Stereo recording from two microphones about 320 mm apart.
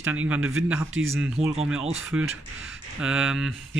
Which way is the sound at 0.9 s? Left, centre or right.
Right.